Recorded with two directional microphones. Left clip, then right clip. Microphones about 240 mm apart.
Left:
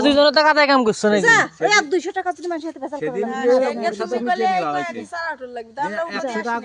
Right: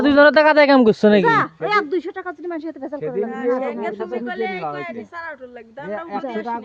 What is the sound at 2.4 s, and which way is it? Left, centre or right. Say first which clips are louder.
Speech: left 2 dB; centre.